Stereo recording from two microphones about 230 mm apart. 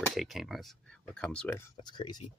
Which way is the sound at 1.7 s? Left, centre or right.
Left.